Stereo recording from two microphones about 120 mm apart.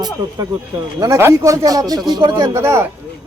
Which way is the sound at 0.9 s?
25° right (ahead or behind).